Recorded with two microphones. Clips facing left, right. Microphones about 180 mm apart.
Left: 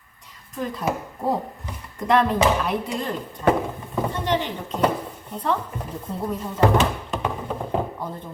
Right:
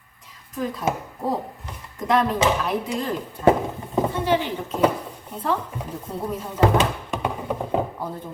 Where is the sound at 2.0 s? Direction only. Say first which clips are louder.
Left 1 dB; centre (ahead or behind).